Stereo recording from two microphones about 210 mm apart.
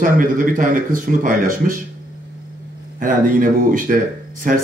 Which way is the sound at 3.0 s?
40° right (ahead or behind).